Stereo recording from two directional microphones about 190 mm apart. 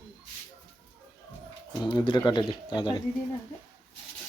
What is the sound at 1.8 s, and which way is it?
Speech, 25° left (ahead or behind).